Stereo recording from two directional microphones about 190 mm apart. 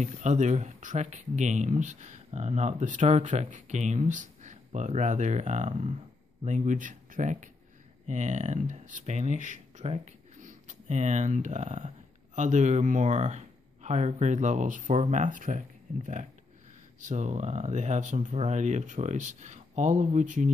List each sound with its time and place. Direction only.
0.0 s speech: 40° right (ahead or behind)